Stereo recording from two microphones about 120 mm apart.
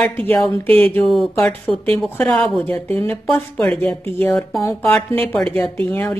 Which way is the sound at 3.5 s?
5° left (ahead or behind).